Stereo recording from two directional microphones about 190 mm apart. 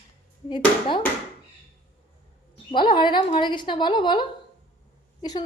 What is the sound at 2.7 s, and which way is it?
Speech, 25° left (ahead or behind).